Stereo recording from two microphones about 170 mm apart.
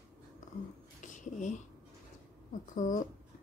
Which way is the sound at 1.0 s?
45° left (ahead or behind).